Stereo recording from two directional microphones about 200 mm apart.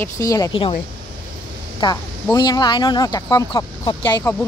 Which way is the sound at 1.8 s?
25° left (ahead or behind).